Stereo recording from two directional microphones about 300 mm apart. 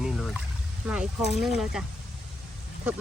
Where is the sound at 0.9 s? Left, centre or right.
Centre.